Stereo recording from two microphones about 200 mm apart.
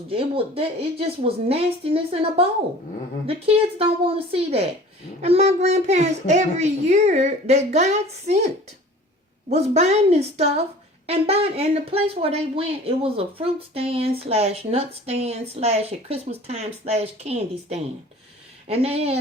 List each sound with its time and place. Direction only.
0.1 s speech: 30° right (ahead or behind)